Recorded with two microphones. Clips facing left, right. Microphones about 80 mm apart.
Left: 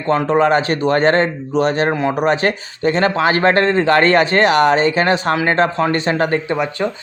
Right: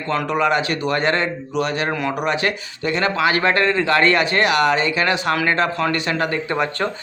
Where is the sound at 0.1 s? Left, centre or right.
Left.